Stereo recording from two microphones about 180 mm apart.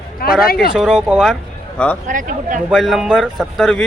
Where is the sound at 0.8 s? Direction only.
5° right (ahead or behind).